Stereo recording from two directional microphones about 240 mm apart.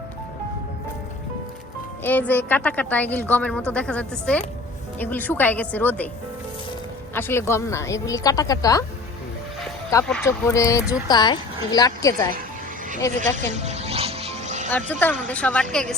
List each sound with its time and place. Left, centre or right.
2.0 s a woman's voice: centre
7.1 s a woman's voice: centre
10.1 s a woman's voice: centre
13.3 s music: right
14.7 s speech: centre